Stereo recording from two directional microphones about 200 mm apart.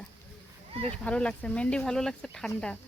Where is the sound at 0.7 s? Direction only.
30° right (ahead or behind).